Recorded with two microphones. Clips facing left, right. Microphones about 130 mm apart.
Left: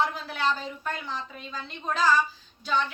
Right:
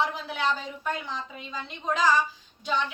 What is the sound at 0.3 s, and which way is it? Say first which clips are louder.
A woman's voice: even; 20° right (ahead or behind).